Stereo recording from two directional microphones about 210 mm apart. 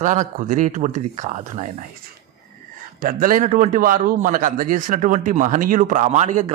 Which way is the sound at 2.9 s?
40° right (ahead or behind).